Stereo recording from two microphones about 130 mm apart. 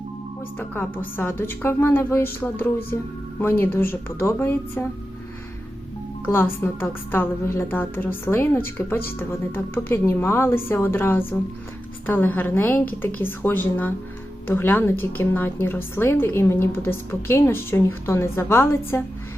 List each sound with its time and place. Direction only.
0.7 s a woman's voice: 15° left (ahead or behind)
6.2 s a woman's voice: 15° left (ahead or behind)